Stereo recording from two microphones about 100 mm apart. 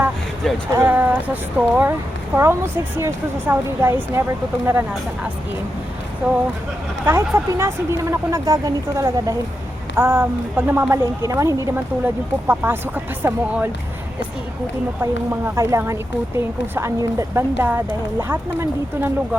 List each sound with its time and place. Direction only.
0.7 s speech: 20° right (ahead or behind)
1.9 s speech: 25° right (ahead or behind)
6.2 s speech: 20° right (ahead or behind); by 9.3 s 35° right (ahead or behind)
9.9 s speech: 25° right (ahead or behind)
15.1 s speech: 25° right (ahead or behind)